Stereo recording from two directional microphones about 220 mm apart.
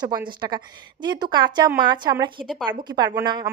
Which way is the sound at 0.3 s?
20° right (ahead or behind).